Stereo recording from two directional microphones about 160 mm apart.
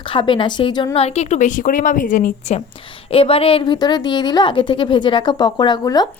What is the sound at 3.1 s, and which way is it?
A woman's voice, 35° left (ahead or behind).